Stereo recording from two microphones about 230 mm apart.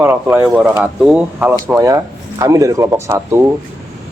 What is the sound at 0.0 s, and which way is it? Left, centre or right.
A man's voice, centre.